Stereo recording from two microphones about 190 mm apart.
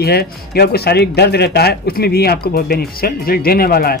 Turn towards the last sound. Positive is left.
turn(degrees=55)  # may be behind; listen again after turning